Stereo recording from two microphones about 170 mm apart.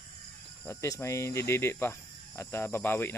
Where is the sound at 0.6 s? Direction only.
15° left (ahead or behind).